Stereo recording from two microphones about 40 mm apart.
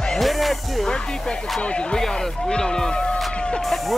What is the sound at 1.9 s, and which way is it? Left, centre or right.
Speech, centre.